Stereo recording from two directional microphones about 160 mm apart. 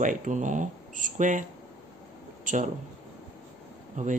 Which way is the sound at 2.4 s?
55° right (ahead or behind).